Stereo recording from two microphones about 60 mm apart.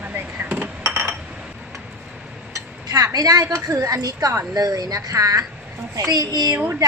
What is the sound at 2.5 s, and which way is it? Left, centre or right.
Dishes, right.